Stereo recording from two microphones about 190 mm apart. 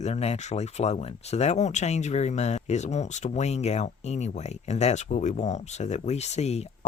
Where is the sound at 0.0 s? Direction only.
35° left (ahead or behind).